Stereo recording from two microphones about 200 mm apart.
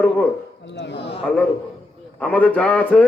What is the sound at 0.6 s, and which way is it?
Speech, 60° left (ahead or behind).